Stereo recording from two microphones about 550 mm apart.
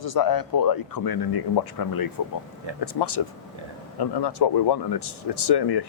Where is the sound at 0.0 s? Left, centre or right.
Left.